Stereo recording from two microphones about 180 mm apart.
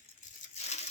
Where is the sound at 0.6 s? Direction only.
35° left (ahead or behind).